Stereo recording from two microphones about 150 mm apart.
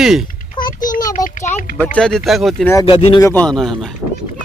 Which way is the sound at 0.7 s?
60° left (ahead or behind).